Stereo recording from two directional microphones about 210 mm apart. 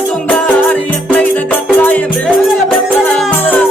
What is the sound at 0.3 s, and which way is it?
Music, 5° left (ahead or behind).